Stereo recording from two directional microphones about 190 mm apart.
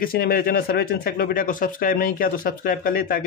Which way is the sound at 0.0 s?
50° left (ahead or behind).